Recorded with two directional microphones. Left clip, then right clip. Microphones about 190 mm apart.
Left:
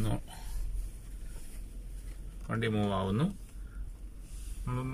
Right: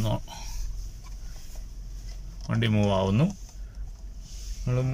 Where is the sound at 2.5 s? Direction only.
20° right (ahead or behind).